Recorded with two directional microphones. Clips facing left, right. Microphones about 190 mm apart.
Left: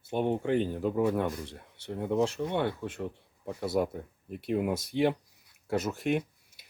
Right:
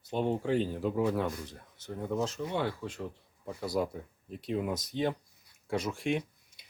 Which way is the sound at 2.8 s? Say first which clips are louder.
Left 3 dB; 5° left (ahead or behind).